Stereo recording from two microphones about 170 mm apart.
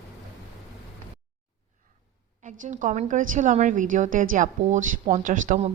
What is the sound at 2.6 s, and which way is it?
A woman's voice, 50° right (ahead or behind).